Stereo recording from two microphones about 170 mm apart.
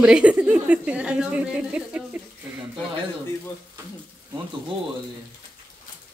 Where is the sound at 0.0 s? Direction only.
5° right (ahead or behind).